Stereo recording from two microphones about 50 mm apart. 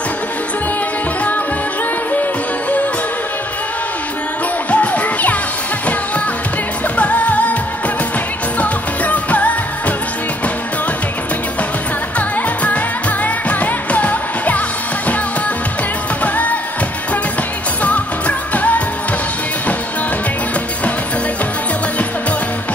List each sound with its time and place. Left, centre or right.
4.6 s music: left
7.0 s music: left
8.5 s music: left
12.6 s music: left
17.8 s music: left